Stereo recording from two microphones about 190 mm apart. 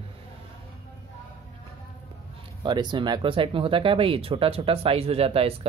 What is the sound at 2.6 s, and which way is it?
Speech, 25° right (ahead or behind).